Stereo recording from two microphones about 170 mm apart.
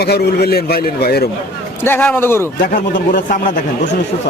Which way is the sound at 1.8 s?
10° left (ahead or behind).